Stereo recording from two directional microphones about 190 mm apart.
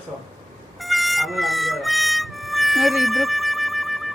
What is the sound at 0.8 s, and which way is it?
Music, centre (ahead or behind).